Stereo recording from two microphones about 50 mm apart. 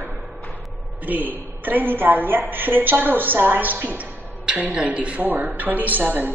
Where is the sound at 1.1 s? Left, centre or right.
Right.